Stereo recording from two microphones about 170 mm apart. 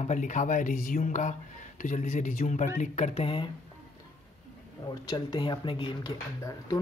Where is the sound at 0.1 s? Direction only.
45° left (ahead or behind).